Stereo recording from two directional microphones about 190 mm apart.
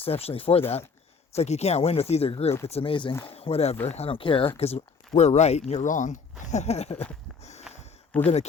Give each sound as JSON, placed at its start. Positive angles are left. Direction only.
{"t": 0.0, "sound": "speech", "side_deg": 30}
{"t": 7.7, "sound": "a sound", "side_deg": -5}
{"t": 8.1, "sound": "speech", "side_deg": 10}